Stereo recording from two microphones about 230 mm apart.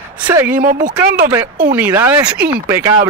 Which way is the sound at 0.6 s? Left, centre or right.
Right.